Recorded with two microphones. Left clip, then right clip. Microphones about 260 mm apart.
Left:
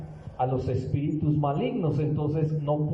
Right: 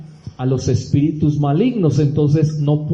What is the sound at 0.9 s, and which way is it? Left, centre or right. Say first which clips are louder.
A man's voice: right 13 dB; right.